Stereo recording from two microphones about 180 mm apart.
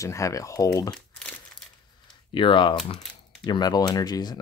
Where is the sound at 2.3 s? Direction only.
30° left (ahead or behind).